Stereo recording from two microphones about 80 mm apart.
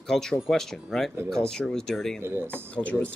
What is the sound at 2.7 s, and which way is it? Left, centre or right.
Speech, centre.